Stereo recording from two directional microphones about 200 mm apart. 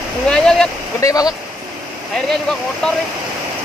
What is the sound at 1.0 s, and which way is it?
Speech, 20° left (ahead or behind).